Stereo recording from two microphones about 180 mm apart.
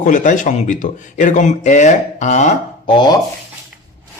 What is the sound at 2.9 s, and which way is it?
Speech, 25° left (ahead or behind).